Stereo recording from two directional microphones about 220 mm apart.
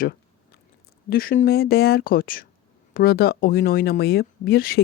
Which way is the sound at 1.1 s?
40° left (ahead or behind).